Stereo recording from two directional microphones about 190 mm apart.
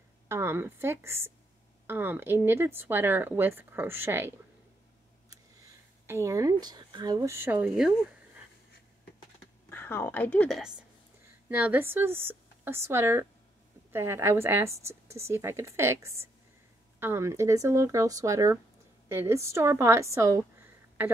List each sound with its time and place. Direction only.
0.3 s speech: 15° right (ahead or behind)
6.0 s speech: 15° right (ahead or behind)
9.7 s a woman's voice: 10° left (ahead or behind)
11.4 s speech: 10° right (ahead or behind)